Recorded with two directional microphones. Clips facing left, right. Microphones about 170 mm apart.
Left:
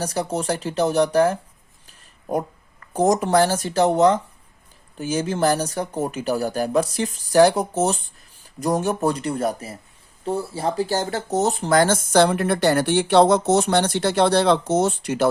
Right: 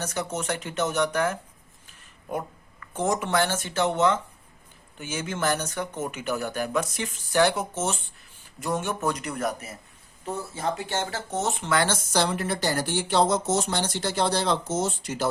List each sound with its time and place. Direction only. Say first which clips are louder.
0.0 s speech: left 6 dB; 35° left (ahead or behind)
1.9 s a sound: left 7 dB; 40° left (ahead or behind)
2.8 s speech: left 7 dB; 40° left (ahead or behind); by 15.3 s 65° left (ahead or behind)